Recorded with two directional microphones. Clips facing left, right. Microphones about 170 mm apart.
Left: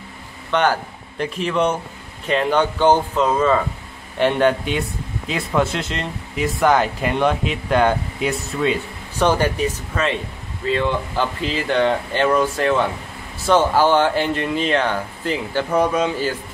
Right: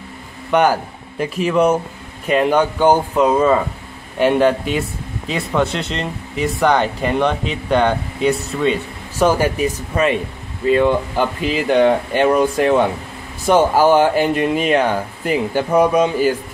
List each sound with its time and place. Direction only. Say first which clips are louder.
0.5 s speech: right 4 dB; 10° right (ahead or behind)